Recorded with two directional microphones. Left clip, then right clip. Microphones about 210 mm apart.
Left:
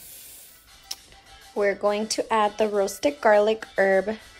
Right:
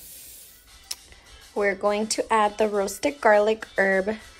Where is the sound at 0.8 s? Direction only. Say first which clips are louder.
Even; 10° left (ahead or behind).